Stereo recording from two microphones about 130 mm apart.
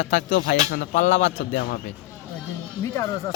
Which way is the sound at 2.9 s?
25° left (ahead or behind).